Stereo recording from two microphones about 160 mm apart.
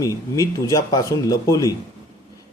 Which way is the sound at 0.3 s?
20° left (ahead or behind).